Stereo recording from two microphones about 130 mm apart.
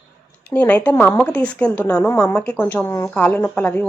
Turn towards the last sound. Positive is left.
turn(degrees=10)  # may be behind; listen again after turning